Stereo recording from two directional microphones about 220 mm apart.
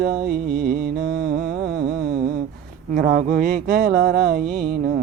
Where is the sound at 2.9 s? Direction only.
45° right (ahead or behind).